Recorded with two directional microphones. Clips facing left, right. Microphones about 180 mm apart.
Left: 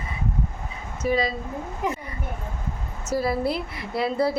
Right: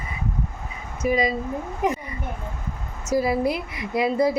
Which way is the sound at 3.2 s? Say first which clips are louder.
Right 2 dB; 15° right (ahead or behind).